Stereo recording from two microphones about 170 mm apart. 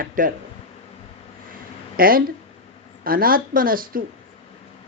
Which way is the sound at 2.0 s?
60° right (ahead or behind).